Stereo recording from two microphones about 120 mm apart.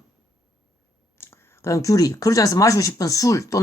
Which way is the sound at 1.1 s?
20° left (ahead or behind).